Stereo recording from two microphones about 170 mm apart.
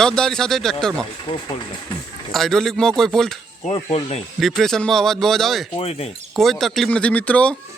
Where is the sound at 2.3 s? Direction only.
Centre (ahead or behind).